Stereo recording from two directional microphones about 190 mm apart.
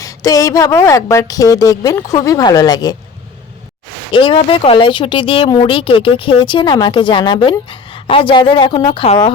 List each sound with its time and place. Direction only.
0.0 s a woman's voice: 15° left (ahead or behind)
4.1 s speech: 25° left (ahead or behind)